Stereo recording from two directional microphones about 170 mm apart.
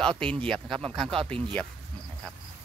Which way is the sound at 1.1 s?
30° right (ahead or behind).